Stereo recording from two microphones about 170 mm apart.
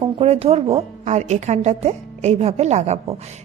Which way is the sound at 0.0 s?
35° right (ahead or behind).